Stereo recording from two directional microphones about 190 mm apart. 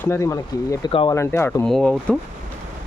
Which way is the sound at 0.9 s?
30° left (ahead or behind).